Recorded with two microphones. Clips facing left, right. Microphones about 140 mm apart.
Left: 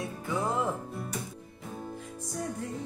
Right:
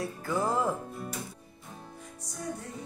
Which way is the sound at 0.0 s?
Centre (ahead or behind).